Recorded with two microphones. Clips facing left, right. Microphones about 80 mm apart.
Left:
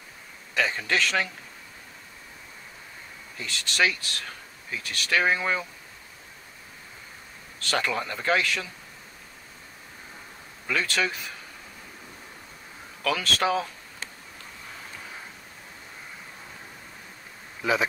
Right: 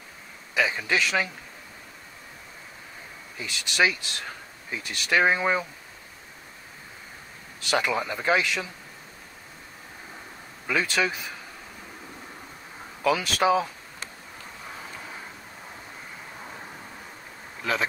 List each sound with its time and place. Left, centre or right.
0.6 s speech: centre
3.3 s speech: centre
7.5 s speech: centre
10.7 s speech: centre
13.0 s speech: centre
17.6 s speech: centre